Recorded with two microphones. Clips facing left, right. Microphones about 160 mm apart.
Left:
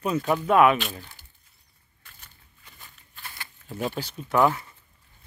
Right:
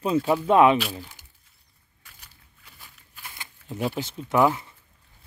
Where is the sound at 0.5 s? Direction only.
25° right (ahead or behind).